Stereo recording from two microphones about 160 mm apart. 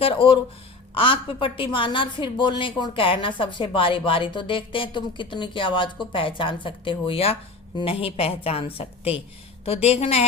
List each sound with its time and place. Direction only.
0.0 s a woman's voice: 30° left (ahead or behind)